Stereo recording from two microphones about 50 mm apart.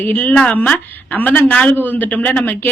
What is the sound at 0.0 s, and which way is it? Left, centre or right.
A man's voice, left.